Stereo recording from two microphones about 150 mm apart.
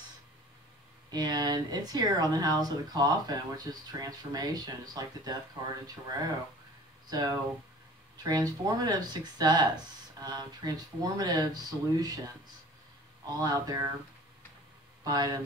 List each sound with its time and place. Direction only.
1.1 s speech: 25° right (ahead or behind)
13.2 s speech: 25° right (ahead or behind)
15.0 s speech: 25° right (ahead or behind)